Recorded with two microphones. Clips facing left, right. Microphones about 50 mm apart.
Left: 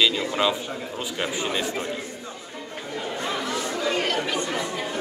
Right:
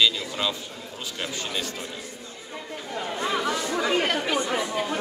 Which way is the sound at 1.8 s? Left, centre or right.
Left.